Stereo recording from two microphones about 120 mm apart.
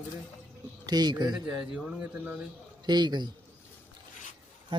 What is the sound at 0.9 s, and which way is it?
Speech, 35° right (ahead or behind).